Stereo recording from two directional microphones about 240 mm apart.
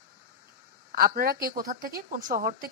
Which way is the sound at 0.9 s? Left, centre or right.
Right.